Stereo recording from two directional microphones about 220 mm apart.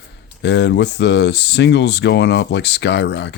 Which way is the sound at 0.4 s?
50° left (ahead or behind).